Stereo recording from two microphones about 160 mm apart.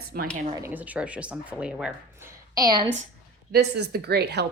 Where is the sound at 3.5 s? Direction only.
90° right.